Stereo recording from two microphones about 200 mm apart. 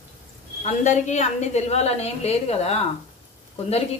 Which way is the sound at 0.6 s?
35° left (ahead or behind).